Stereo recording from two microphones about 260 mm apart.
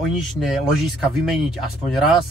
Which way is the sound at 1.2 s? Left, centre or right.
Centre.